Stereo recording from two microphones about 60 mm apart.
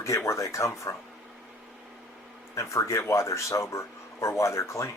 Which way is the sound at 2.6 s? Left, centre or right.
Left.